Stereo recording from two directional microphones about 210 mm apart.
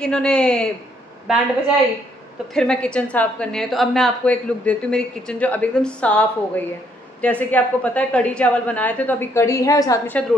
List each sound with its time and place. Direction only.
0.0 s a woman's voice: 5° left (ahead or behind)
2.5 s a woman's voice: 5° left (ahead or behind)